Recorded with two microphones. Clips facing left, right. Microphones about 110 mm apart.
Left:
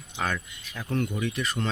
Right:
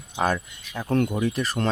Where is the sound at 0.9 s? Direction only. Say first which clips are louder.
Right 6 dB; 55° right (ahead or behind).